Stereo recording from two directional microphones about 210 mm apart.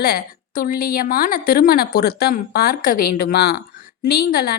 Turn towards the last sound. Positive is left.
turn(degrees=45)  # may be behind; listen again after turning